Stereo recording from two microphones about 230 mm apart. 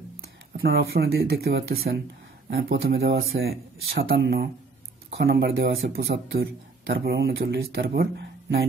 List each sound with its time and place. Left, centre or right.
0.5 s speech: right